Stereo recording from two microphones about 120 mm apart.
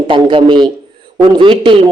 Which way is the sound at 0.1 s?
45° right (ahead or behind).